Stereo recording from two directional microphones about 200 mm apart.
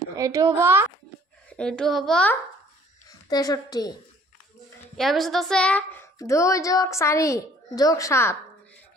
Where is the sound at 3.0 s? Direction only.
20° left (ahead or behind).